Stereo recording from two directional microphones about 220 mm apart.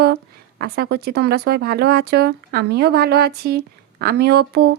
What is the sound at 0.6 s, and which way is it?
Speech, 45° right (ahead or behind).